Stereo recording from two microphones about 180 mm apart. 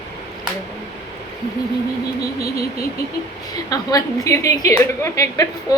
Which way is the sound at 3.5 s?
20° left (ahead or behind).